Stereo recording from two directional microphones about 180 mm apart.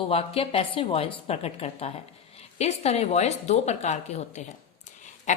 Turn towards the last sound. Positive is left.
turn(degrees=40)  # may be behind; listen again after turning